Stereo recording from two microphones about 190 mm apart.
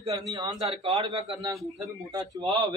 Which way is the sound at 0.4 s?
30° right (ahead or behind).